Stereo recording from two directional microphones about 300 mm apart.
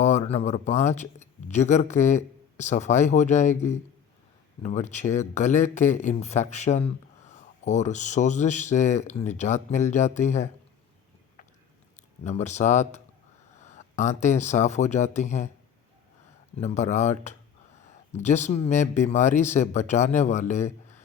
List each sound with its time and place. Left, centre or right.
0.0 s speech: left
12.2 s speech: left
13.6 s a sound: left
14.2 s speech: left
16.6 s speech: left